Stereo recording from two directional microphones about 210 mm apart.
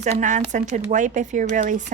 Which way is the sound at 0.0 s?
35° right (ahead or behind).